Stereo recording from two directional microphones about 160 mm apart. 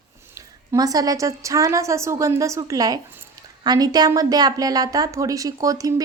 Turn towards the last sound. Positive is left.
turn(degrees=-20)  # may be behind; listen again after turning